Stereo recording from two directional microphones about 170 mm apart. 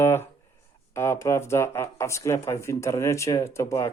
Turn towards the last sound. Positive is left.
turn(degrees=20)  # may be behind; listen again after turning